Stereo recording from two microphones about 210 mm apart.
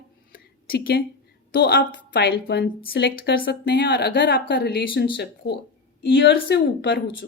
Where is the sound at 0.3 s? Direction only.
45° left (ahead or behind).